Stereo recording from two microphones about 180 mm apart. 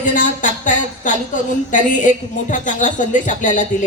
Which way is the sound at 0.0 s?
45° left (ahead or behind).